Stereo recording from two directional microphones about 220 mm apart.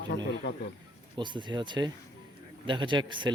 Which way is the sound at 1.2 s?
20° right (ahead or behind).